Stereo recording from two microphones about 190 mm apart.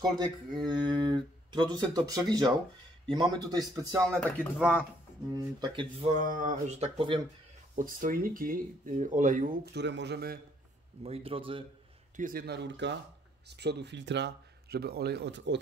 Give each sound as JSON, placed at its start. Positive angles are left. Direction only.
{"t": 0.6, "sound": "a man's voice", "side_deg": -25}
{"t": 4.1, "sound": "speech", "side_deg": 5}
{"t": 5.3, "sound": "a man's voice", "side_deg": -25}
{"t": 6.1, "sound": "speech", "side_deg": -45}
{"t": 7.7, "sound": "speech", "side_deg": -45}
{"t": 11.0, "sound": "a man's voice", "side_deg": -30}
{"t": 12.2, "sound": "speech", "side_deg": -50}